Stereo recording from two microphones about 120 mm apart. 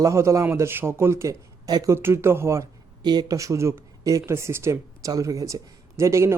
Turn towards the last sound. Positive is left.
turn(degrees=-25)  # may be behind; listen again after turning